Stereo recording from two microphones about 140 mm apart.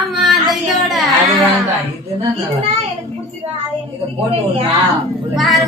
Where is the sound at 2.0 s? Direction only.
45° right (ahead or behind).